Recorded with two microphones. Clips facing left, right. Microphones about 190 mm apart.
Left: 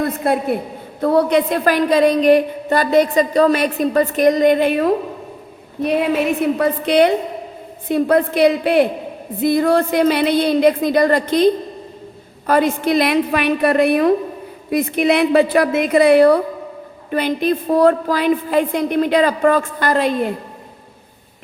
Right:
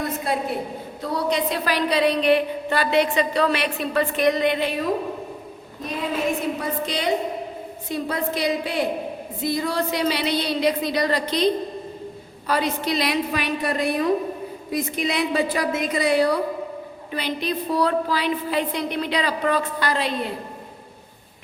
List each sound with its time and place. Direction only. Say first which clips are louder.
0.2 s a woman's voice: left 8 dB; 55° left (ahead or behind)
5.8 s a woman's voice: left 8 dB; 65° left (ahead or behind); by 20.3 s 50° left (ahead or behind)